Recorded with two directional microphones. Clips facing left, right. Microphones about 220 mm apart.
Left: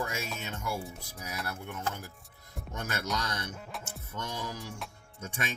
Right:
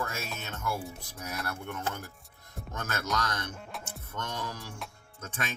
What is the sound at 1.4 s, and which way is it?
Speech, 5° left (ahead or behind).